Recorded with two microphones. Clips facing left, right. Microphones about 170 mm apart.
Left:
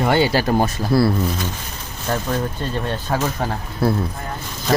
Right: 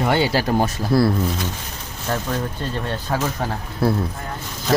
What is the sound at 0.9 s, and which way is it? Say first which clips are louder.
Speech: left 1 dB; centre (ahead or behind).